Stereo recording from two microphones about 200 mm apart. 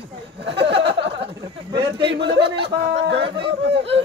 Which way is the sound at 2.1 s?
60° right (ahead or behind).